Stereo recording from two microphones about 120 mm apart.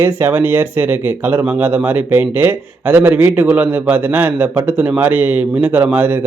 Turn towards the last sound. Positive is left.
turn(degrees=-15)  # may be behind; listen again after turning